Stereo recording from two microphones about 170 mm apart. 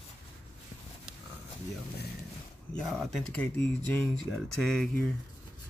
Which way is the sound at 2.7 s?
Centre (ahead or behind).